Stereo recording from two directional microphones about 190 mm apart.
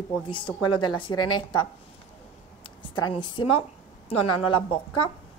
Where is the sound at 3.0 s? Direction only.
25° left (ahead or behind).